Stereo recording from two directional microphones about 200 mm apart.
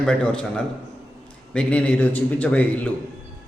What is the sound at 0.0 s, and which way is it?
Speech, 5° left (ahead or behind).